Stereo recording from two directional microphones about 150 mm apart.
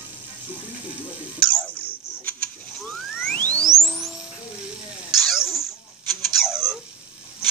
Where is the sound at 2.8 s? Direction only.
Centre (ahead or behind).